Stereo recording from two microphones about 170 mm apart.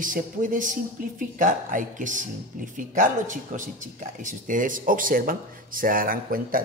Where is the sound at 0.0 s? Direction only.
50° right (ahead or behind).